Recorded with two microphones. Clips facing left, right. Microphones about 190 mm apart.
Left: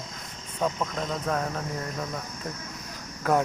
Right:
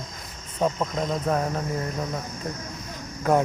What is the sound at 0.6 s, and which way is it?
Speech, 20° right (ahead or behind).